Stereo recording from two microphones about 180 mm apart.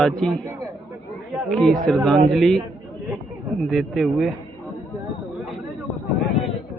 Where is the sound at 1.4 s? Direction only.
5° left (ahead or behind).